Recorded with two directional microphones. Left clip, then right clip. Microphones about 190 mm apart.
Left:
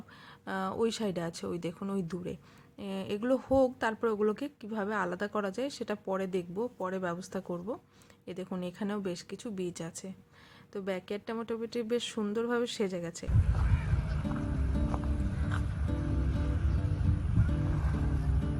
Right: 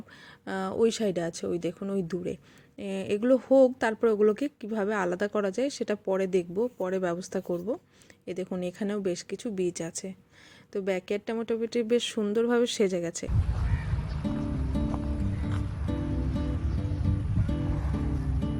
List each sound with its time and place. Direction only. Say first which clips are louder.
0.4 s speech: right 5 dB; 15° right (ahead or behind)
13.7 s music: right 1 dB; 50° right (ahead or behind)
14.2 s music: right 6 dB; centre (ahead or behind)